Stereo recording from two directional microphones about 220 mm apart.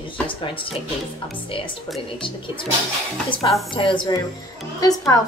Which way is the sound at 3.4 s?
20° left (ahead or behind).